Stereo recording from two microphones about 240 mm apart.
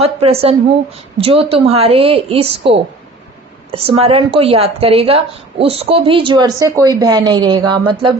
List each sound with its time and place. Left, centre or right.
0.0 s a woman's voice: right